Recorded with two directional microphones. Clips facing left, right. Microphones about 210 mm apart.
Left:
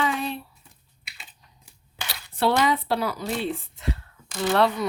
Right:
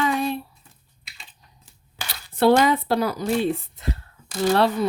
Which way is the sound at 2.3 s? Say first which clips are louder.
Right 5 dB; 45° right (ahead or behind).